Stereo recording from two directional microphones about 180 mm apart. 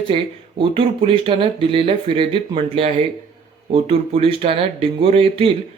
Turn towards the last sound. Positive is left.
turn(degrees=-30)  # may be behind; listen again after turning